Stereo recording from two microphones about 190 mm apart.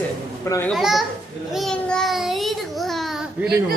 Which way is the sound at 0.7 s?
Centre (ahead or behind).